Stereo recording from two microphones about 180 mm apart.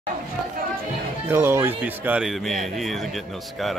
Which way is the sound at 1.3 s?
15° right (ahead or behind).